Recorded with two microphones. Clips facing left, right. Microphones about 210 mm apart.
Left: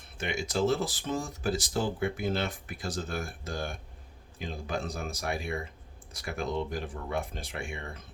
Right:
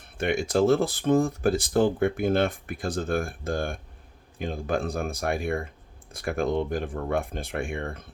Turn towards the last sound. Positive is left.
turn(degrees=-55)  # may be behind; listen again after turning